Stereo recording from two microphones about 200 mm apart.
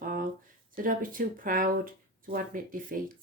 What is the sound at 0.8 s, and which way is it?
Speech, 45° right (ahead or behind).